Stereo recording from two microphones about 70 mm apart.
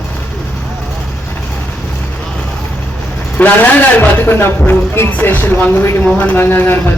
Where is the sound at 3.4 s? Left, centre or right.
Left.